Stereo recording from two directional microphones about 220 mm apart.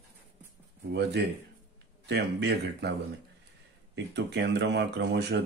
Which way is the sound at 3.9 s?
50° right (ahead or behind).